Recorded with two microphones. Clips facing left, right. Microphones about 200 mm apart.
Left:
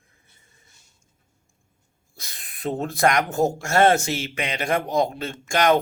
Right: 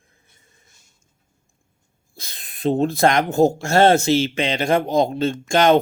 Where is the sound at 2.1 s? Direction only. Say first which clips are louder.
Right 3 dB; 25° right (ahead or behind).